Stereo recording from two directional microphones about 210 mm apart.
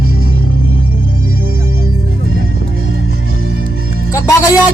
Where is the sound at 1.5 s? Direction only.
75° right (ahead or behind).